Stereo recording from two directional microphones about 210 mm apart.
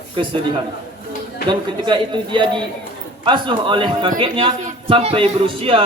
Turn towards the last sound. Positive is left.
turn(degrees=-25)  # may be behind; listen again after turning